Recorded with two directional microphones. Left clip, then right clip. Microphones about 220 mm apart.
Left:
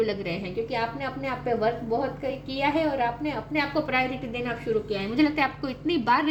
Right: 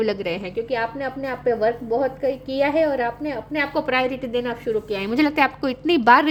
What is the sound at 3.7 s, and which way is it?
A woman's voice, 50° right (ahead or behind).